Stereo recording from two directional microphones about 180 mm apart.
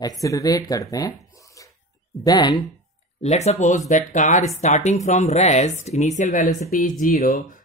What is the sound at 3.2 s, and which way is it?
Speech, 35° left (ahead or behind).